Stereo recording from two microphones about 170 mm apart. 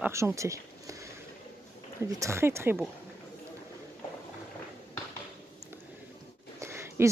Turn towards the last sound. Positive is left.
turn(degrees=-15)  # may be behind; listen again after turning